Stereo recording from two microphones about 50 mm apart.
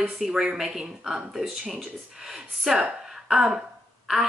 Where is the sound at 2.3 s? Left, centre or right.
Centre.